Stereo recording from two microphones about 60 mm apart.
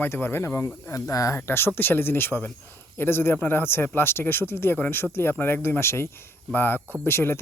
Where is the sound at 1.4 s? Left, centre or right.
Left.